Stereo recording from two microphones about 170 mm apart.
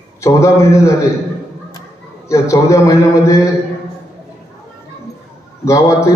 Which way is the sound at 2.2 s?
15° left (ahead or behind).